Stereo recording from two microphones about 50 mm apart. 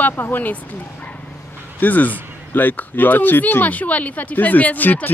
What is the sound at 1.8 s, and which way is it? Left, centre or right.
Speech, left.